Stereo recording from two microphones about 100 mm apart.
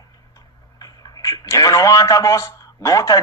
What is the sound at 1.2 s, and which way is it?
A man's voice, 35° left (ahead or behind).